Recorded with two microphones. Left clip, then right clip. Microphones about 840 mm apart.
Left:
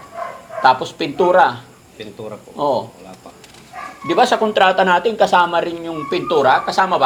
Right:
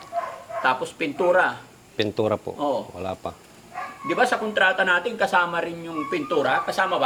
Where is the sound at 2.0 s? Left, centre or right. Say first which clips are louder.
Right 8 dB; right.